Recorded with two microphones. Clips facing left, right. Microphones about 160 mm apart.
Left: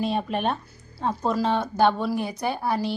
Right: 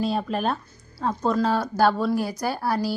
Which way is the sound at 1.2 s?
Centre (ahead or behind).